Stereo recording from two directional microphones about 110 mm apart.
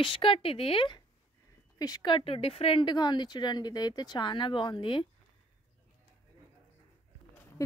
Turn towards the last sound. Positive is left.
turn(degrees=30)  # may be behind; listen again after turning